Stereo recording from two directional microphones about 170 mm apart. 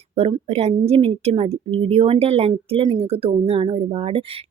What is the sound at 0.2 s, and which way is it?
Speech, 35° right (ahead or behind).